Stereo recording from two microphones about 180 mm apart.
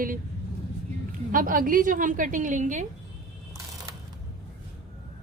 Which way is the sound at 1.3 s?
50° right (ahead or behind).